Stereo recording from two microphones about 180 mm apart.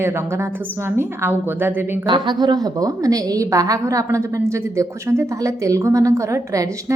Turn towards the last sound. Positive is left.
turn(degrees=-15)  # may be behind; listen again after turning